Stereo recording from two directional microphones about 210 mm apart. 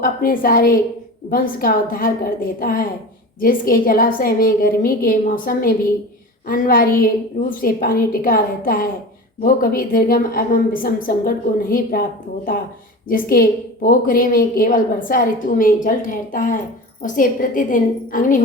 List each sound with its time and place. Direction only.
0.0 s a woman's voice: 45° left (ahead or behind)
13.1 s a woman's voice: 45° left (ahead or behind)